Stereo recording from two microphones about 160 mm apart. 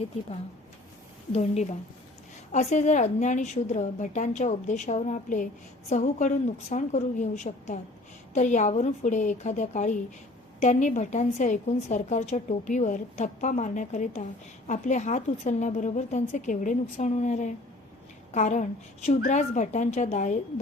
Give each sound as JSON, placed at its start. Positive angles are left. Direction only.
{"t": 1.3, "sound": "a woman's voice", "side_deg": 45}